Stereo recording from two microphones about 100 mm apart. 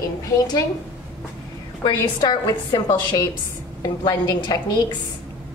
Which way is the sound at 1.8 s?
45° left (ahead or behind).